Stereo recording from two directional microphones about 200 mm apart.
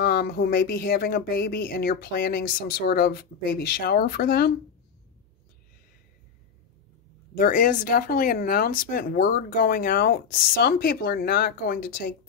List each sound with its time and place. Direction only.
0.0 s speech: 50° left (ahead or behind)
7.3 s speech: 45° left (ahead or behind)